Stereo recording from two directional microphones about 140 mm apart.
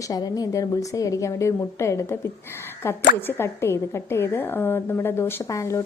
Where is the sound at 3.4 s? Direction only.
20° left (ahead or behind).